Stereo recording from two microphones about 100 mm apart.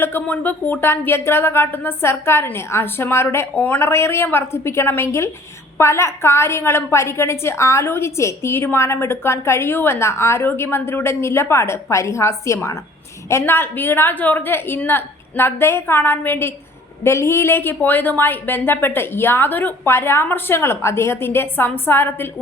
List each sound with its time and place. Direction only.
0.0 s a woman's voice: 20° left (ahead or behind)